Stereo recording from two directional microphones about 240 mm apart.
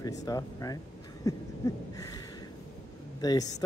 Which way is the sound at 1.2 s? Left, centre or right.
Centre.